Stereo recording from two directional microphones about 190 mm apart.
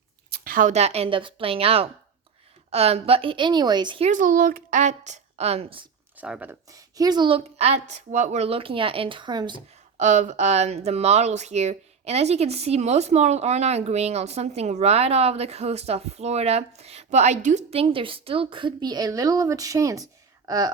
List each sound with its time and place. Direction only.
0.4 s a woman's voice: 45° right (ahead or behind); by 4.1 s 25° right (ahead or behind)
4.1 s speech: 45° right (ahead or behind); by 5.9 s 30° right (ahead or behind)
6.1 s a woman's voice: 5° right (ahead or behind); by 9.6 s 25° right (ahead or behind)
10.0 s speech: 40° right (ahead or behind); by 20.1 s 15° right (ahead or behind)